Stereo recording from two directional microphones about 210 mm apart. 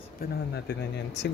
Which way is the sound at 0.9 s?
55° left (ahead or behind).